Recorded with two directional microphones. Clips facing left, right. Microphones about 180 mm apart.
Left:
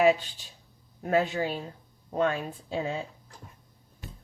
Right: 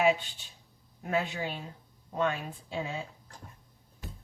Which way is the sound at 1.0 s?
40° left (ahead or behind).